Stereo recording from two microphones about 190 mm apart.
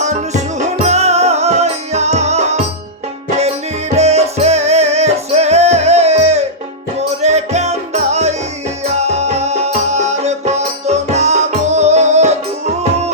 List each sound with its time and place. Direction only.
0.0 s music: 40° right (ahead or behind)